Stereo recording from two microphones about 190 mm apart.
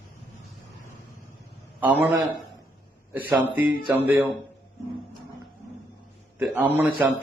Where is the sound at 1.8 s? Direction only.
10° right (ahead or behind).